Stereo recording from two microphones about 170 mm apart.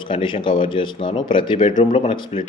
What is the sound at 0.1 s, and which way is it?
Speech, 30° left (ahead or behind).